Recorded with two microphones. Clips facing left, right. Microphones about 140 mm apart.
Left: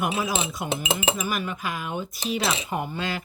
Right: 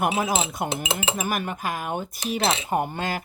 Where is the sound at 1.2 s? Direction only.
50° right (ahead or behind).